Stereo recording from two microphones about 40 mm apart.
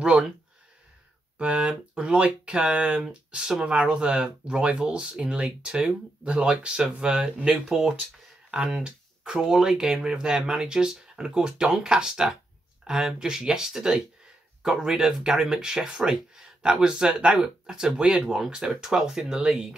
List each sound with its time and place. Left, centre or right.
0.0 s speech: right
1.4 s speech: right
7.6 s speech: centre